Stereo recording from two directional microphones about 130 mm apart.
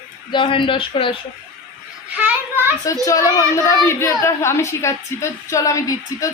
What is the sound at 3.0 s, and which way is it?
A woman's voice, 25° left (ahead or behind).